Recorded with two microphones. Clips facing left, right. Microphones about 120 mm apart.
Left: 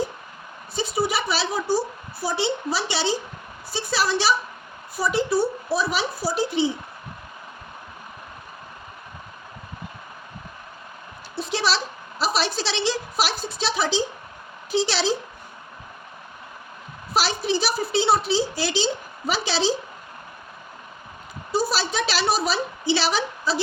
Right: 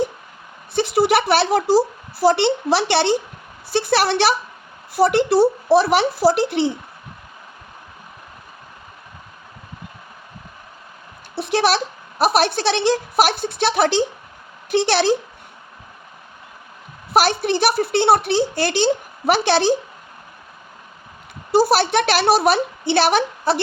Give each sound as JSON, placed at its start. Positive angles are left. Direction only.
{"t": 0.7, "sound": "a woman's voice", "side_deg": -70}
{"t": 11.3, "sound": "a sound", "side_deg": -60}
{"t": 12.2, "sound": "speech", "side_deg": -60}
{"t": 17.2, "sound": "speech", "side_deg": -60}
{"t": 21.5, "sound": "speech", "side_deg": -70}